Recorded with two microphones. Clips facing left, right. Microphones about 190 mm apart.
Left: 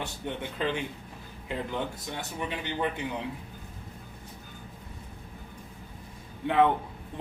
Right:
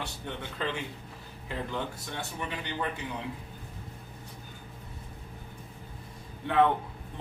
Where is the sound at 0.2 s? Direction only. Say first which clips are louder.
Left 5 dB; 15° left (ahead or behind).